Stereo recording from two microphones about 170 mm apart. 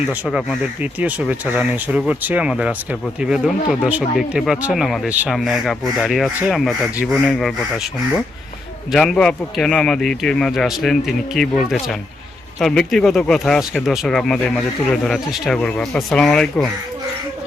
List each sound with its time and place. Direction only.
0.1 s speech: 5° right (ahead or behind)
8.9 s speech: 5° left (ahead or behind)